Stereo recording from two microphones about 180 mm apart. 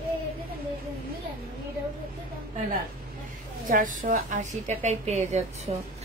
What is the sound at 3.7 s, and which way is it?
A woman's voice, 50° right (ahead or behind).